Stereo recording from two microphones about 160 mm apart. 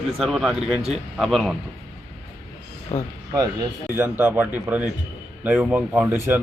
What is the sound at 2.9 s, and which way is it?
Speech, 45° left (ahead or behind).